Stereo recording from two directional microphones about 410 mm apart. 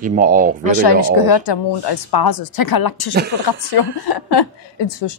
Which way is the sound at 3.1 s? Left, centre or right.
Right.